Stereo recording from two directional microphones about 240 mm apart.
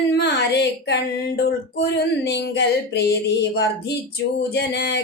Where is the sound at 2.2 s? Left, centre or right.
Left.